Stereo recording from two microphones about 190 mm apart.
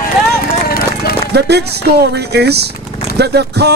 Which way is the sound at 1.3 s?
60° right (ahead or behind).